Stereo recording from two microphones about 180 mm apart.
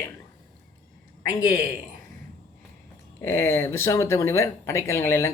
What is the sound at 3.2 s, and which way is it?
Speech, 15° left (ahead or behind).